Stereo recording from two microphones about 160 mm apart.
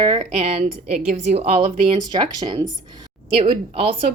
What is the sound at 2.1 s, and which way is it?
A woman's voice, 25° right (ahead or behind).